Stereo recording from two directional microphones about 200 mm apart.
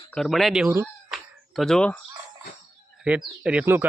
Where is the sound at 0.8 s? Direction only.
Centre (ahead or behind).